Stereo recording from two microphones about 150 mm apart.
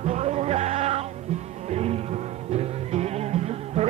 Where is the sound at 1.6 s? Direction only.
45° right (ahead or behind).